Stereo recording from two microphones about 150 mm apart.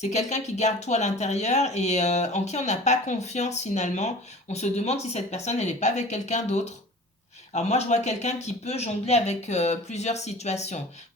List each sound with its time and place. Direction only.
0.0 s speech: 50° left (ahead or behind)